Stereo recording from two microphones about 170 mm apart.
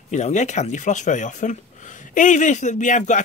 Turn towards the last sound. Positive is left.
turn(degrees=45)  # may be behind; listen again after turning